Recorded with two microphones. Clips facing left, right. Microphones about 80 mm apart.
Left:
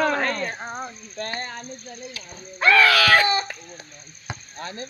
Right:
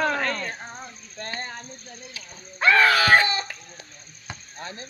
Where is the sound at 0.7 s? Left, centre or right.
Left.